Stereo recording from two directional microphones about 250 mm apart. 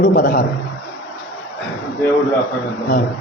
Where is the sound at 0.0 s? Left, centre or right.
Left.